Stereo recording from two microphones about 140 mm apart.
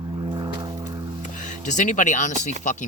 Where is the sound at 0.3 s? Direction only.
30° right (ahead or behind).